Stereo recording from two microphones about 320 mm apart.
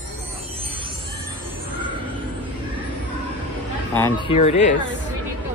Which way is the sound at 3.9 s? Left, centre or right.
Centre.